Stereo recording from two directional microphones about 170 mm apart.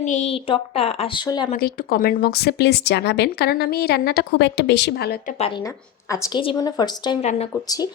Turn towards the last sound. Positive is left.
turn(degrees=20)  # may be behind; listen again after turning